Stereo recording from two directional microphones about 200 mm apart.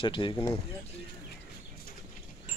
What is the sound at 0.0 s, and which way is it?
Speech, 25° left (ahead or behind).